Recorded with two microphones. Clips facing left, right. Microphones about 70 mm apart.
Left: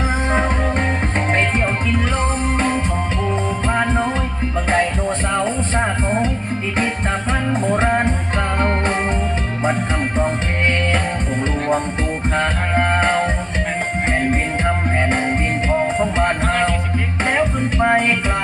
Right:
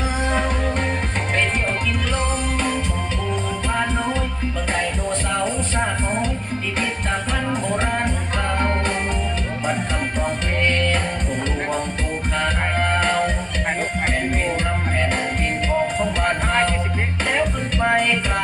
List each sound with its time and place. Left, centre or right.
0.3 s music: left
3.7 s music: left
7.7 s music: left
10.2 s music: left
12.4 s music: left
14.6 s music: left